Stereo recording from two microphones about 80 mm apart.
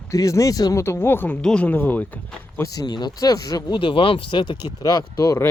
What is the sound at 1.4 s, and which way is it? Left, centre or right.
Speech, centre.